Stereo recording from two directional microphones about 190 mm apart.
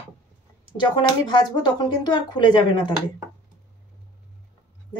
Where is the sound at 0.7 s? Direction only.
25° left (ahead or behind).